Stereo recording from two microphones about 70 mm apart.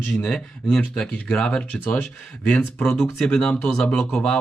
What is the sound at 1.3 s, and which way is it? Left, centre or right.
Speech, centre.